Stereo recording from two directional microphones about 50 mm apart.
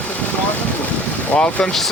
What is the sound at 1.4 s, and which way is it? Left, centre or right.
Speech, left.